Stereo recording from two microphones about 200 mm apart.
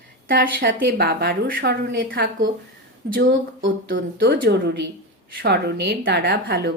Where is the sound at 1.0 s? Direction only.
50° right (ahead or behind).